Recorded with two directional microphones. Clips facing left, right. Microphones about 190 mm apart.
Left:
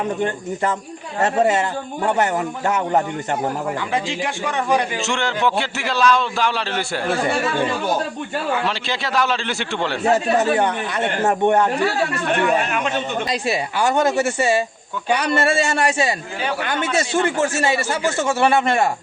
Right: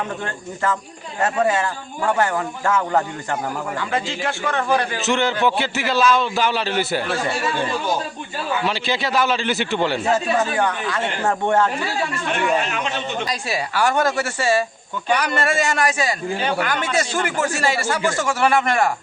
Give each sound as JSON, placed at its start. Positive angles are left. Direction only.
{"t": 0.2, "sound": "speech", "side_deg": 20}
{"t": 2.6, "sound": "speech", "side_deg": 20}
{"t": 5.0, "sound": "a man's voice", "side_deg": 0}
{"t": 8.6, "sound": "a man's voice", "side_deg": 0}
{"t": 10.5, "sound": "speech", "side_deg": 25}
{"t": 12.4, "sound": "speech", "side_deg": 50}
{"t": 13.5, "sound": "speech", "side_deg": 20}